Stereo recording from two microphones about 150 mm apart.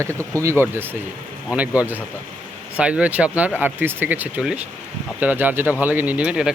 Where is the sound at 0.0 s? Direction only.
20° right (ahead or behind).